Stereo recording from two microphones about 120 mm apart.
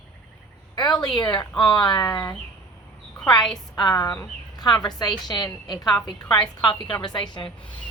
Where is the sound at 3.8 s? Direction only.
35° left (ahead or behind).